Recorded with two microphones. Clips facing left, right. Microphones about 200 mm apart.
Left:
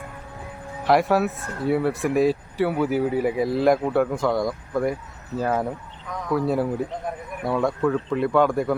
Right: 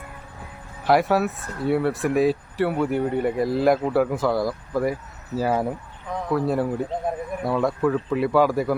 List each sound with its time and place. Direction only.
0.9 s speech: centre (ahead or behind)
6.1 s a sound: 30° right (ahead or behind)
6.3 s speech: centre (ahead or behind)